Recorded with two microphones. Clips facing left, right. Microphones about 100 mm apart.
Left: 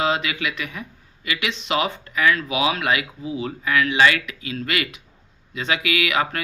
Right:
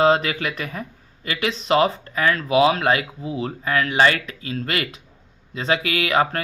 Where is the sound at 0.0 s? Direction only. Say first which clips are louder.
Right 5 dB; 40° right (ahead or behind).